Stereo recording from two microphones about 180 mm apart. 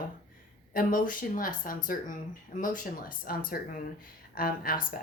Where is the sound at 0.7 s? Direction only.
50° left (ahead or behind).